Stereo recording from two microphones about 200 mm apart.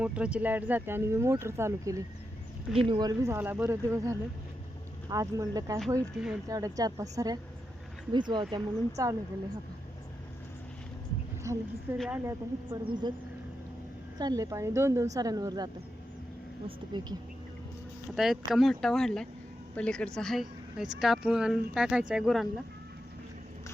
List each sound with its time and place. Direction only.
0.0 s speech: 5° right (ahead or behind)
6.2 s a woman's voice: centre (ahead or behind)
6.5 s a woman's voice: 15° right (ahead or behind)
11.5 s a woman's voice: 15° right (ahead or behind)
11.9 s a woman's voice: centre (ahead or behind)
12.2 s a woman's voice: 15° right (ahead or behind)
14.2 s a woman's voice: 20° right (ahead or behind)
18.1 s a woman's voice: centre (ahead or behind)